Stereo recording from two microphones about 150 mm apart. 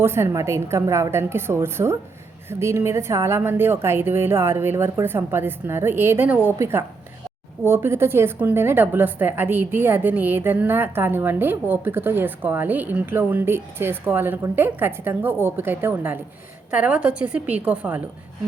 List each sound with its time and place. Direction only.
0.0 s a woman's voice: 15° right (ahead or behind)